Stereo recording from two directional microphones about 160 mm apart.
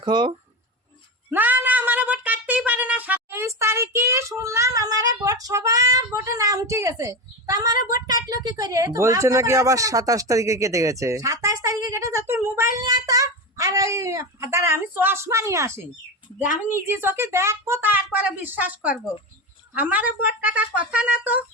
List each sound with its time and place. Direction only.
0.0 s speech: 30° right (ahead or behind)
1.3 s a sound: 10° right (ahead or behind)
8.0 s speech: 25° right (ahead or behind); by 21.4 s 10° right (ahead or behind)